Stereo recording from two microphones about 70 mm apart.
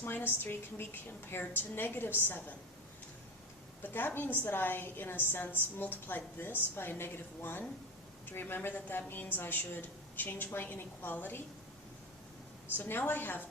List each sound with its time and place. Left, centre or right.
0.0 s a woman's voice: left
3.8 s a woman's voice: left
12.7 s a woman's voice: left